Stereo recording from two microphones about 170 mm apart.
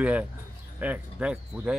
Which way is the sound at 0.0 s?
10° right (ahead or behind).